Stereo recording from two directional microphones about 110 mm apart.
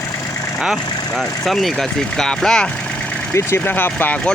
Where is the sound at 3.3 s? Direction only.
20° left (ahead or behind).